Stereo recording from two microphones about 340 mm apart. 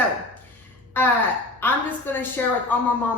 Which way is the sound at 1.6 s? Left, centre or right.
Centre.